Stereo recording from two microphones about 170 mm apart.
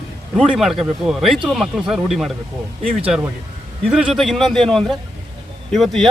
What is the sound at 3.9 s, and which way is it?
Speech, 5° right (ahead or behind).